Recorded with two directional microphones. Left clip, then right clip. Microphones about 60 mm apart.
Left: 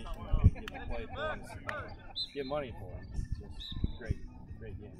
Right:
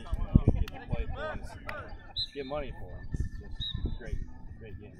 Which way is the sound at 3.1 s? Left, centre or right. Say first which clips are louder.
Right 6 dB; left.